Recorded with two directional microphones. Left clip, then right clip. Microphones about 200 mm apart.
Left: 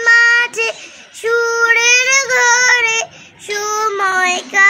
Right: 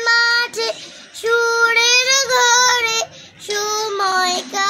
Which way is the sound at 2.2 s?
5° left (ahead or behind).